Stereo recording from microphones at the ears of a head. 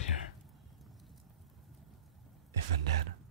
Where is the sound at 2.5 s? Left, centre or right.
Right.